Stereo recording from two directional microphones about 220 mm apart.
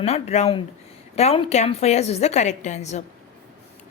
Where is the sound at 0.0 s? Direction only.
30° left (ahead or behind).